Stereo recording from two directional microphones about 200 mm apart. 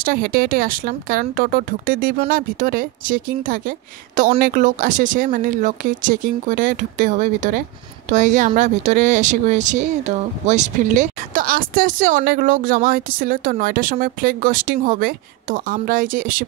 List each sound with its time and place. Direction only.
0.0 s speech: 45° right (ahead or behind)